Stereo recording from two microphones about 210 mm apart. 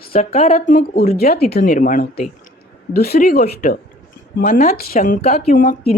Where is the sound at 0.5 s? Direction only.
40° left (ahead or behind).